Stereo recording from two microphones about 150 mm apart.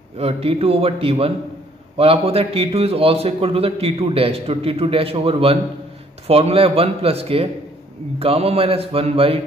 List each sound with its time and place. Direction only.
0.2 s a man's voice: 40° right (ahead or behind)